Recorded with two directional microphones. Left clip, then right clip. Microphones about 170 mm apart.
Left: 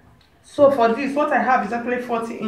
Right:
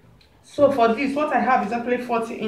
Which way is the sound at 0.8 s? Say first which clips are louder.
Left 1 dB; 15° right (ahead or behind).